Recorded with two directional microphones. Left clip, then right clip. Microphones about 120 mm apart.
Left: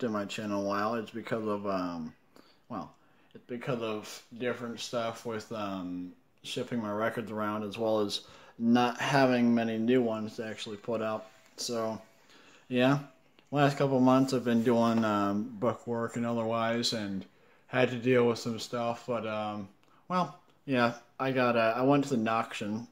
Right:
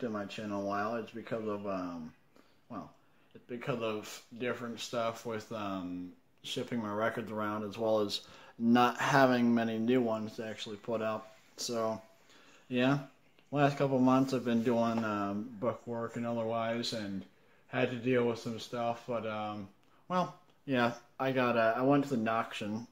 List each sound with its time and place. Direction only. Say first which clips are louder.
0.0 s speech: left 5 dB; 35° left (ahead or behind)
3.4 s speech: left 2 dB; 5° left (ahead or behind)
12.6 s speech: left 4 dB; 20° left (ahead or behind)